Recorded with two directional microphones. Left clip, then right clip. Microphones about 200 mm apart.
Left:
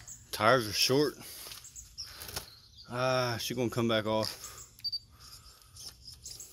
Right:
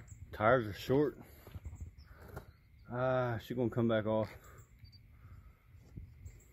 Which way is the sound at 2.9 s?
10° left (ahead or behind).